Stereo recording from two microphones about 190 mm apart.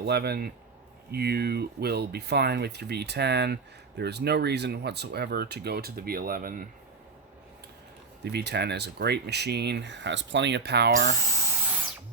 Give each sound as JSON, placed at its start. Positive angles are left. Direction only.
{"t": 0.0, "sound": "speech", "side_deg": -60}
{"t": 8.2, "sound": "speech", "side_deg": -60}